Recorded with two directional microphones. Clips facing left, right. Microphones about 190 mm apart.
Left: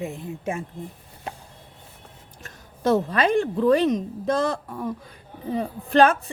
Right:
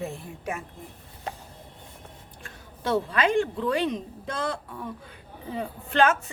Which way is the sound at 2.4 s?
40° left (ahead or behind).